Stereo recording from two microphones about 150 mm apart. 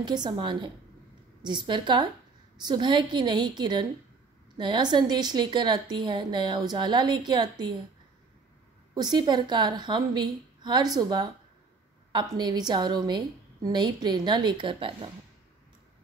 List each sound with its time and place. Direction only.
0.0 s a woman's voice: 30° right (ahead or behind)
8.9 s a woman's voice: 30° right (ahead or behind)